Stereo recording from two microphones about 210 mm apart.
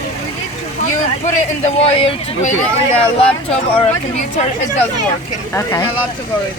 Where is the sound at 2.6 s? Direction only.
5° left (ahead or behind).